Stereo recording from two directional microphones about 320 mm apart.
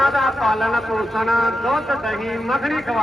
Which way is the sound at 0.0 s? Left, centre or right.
Centre.